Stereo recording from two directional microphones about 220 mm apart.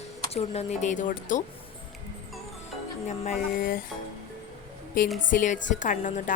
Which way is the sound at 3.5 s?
40° left (ahead or behind).